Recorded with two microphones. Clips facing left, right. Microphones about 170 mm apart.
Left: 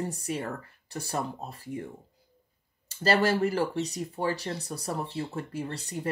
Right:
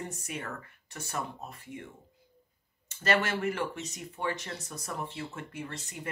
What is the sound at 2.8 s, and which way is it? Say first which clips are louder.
Speech: left 5 dB; 35° left (ahead or behind).